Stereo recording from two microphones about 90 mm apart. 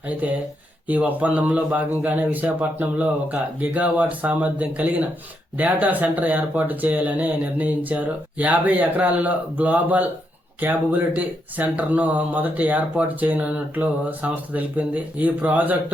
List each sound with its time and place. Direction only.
0.9 s speech: 15° right (ahead or behind)